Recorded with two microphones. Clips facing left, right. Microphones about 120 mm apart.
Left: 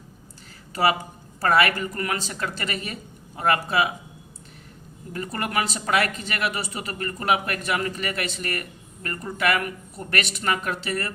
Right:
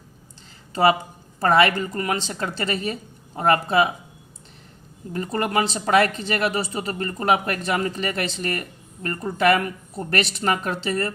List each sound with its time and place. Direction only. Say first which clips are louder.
0.7 s speech: right 4 dB; 25° right (ahead or behind)
5.1 s speech: right 4 dB; 30° right (ahead or behind)